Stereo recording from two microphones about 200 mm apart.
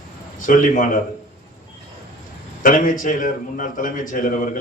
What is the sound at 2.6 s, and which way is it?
A man's voice, 40° left (ahead or behind).